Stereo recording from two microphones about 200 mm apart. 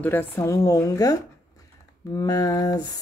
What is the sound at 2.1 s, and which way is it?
Speech, 20° left (ahead or behind).